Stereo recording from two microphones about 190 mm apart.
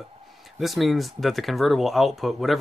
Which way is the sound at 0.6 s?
Centre (ahead or behind).